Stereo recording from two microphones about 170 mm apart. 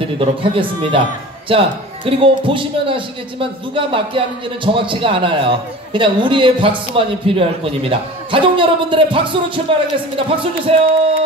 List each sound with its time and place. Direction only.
0.0 s a man's voice: 30° right (ahead or behind)